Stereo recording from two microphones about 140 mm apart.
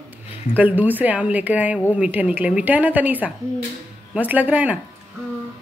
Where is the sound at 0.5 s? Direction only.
10° right (ahead or behind).